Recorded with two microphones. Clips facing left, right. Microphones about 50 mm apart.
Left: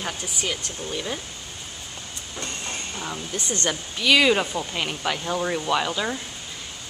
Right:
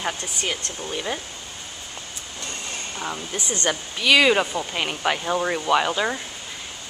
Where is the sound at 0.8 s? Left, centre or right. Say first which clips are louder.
Right 2 dB; centre.